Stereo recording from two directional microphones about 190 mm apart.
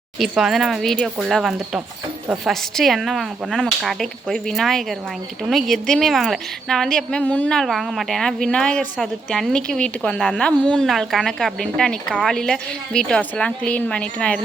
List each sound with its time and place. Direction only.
0.2 s a woman's voice: centre (ahead or behind)